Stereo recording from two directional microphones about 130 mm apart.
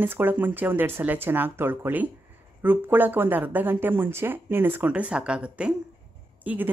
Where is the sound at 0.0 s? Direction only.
15° right (ahead or behind).